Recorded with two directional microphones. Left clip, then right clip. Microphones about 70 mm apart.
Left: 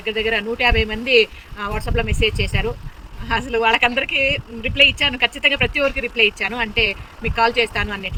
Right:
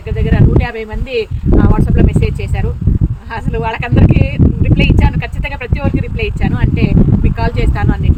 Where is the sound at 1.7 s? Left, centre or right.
Right.